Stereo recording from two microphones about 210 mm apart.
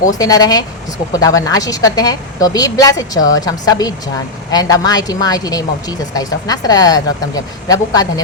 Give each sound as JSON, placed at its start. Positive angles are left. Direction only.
{"t": 0.2, "sound": "a woman's voice", "side_deg": 20}